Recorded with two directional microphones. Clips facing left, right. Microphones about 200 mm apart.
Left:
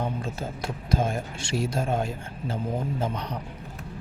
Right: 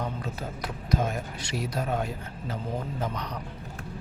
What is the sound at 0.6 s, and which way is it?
Speech, 30° left (ahead or behind).